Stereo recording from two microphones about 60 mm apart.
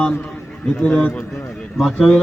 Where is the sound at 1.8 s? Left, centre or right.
Centre.